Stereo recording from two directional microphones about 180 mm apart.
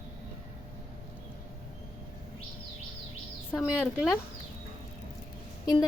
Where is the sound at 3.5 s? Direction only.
5° right (ahead or behind).